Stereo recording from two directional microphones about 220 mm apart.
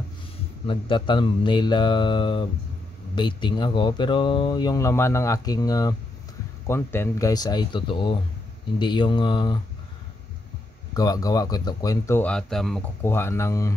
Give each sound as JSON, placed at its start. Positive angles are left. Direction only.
{"t": 0.7, "sound": "speech", "side_deg": 20}
{"t": 11.0, "sound": "speech", "side_deg": 15}